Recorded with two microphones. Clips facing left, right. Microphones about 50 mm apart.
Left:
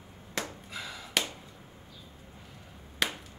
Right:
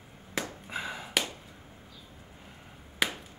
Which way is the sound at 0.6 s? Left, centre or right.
Right.